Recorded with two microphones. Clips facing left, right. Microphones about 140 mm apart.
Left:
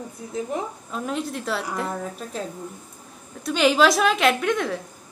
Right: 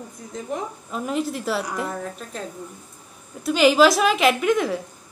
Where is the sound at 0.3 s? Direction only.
Centre (ahead or behind).